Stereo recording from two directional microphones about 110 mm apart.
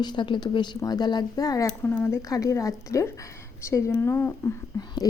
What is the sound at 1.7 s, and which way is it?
Speech, 15° left (ahead or behind).